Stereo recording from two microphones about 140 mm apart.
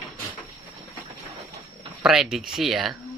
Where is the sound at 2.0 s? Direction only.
5° right (ahead or behind).